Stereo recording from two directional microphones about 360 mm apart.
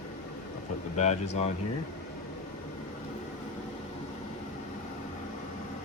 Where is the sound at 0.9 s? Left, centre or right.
Centre.